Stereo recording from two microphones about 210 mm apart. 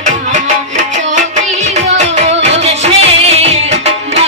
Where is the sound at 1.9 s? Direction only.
30° right (ahead or behind).